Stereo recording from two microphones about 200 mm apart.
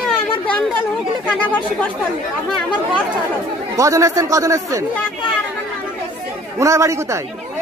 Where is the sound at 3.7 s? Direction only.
15° right (ahead or behind).